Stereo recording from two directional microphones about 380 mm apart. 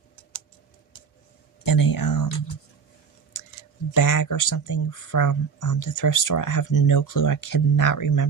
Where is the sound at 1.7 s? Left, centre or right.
Left.